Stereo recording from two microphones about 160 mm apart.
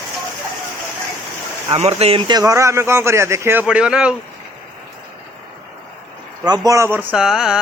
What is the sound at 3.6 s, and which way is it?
Mantra, 5° right (ahead or behind).